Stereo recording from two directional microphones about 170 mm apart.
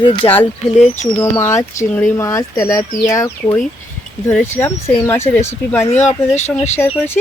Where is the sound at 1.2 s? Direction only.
15° left (ahead or behind).